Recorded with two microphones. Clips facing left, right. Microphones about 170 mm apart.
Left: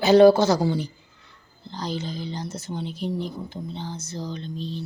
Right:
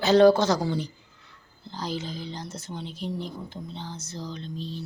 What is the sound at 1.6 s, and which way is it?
Speech, 5° right (ahead or behind).